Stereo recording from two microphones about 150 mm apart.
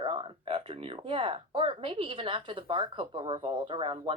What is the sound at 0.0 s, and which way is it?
Speech, 35° right (ahead or behind).